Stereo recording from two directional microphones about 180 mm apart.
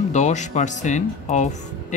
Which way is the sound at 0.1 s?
40° left (ahead or behind).